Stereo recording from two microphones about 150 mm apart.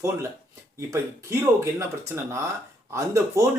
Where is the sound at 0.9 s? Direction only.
20° right (ahead or behind).